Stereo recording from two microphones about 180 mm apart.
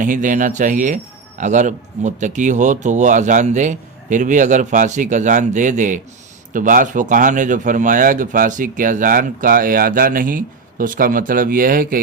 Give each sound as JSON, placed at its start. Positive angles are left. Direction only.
{"t": 0.0, "sound": "speech", "side_deg": -45}